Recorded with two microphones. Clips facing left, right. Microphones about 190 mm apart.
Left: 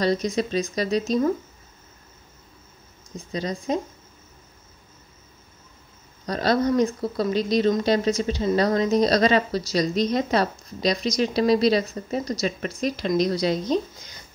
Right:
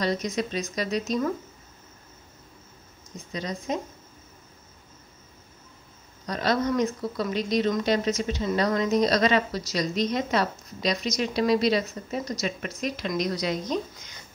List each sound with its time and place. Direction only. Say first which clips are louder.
0.0 s a woman's voice: left 4 dB; 35° left (ahead or behind)
3.3 s a woman's voice: left 4 dB; 35° left (ahead or behind)
6.2 s a woman's voice: left 4 dB; 35° left (ahead or behind)